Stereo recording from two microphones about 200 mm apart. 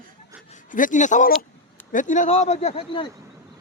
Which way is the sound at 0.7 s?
40° left (ahead or behind).